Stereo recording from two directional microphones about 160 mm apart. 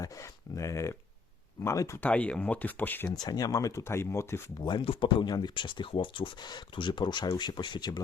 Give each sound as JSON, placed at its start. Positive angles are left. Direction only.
{"t": 0.0, "sound": "speech", "side_deg": 20}
{"t": 3.2, "sound": "speech", "side_deg": 25}
{"t": 4.6, "sound": "speech", "side_deg": 30}